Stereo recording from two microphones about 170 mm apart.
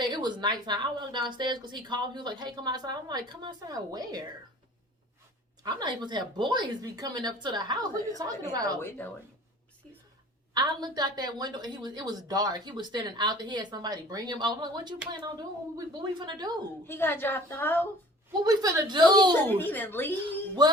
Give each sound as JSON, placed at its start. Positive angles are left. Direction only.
{"t": 0.0, "sound": "a sound", "side_deg": -25}
{"t": 0.6, "sound": "a woman's voice", "side_deg": -25}
{"t": 5.6, "sound": "a woman's voice", "side_deg": -25}
{"t": 8.8, "sound": "a woman's voice", "side_deg": 10}
{"t": 10.5, "sound": "a woman's voice", "side_deg": -25}
{"t": 16.8, "sound": "a woman's voice", "side_deg": 15}
{"t": 18.4, "sound": "a woman's voice", "side_deg": -20}
{"t": 19.5, "sound": "a woman's voice", "side_deg": 10}
{"t": 20.6, "sound": "a woman's voice", "side_deg": -25}